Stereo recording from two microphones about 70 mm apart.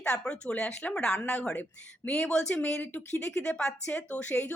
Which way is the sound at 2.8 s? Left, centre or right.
Left.